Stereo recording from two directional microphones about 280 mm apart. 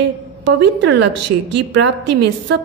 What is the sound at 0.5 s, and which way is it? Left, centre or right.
A woman's voice, right.